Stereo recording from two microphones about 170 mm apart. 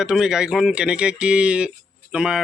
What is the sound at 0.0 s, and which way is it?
Speech, 5° right (ahead or behind).